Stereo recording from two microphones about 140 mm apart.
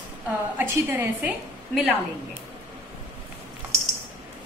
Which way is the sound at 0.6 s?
10° right (ahead or behind).